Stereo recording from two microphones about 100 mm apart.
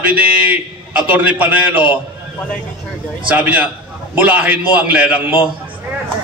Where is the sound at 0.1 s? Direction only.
15° right (ahead or behind).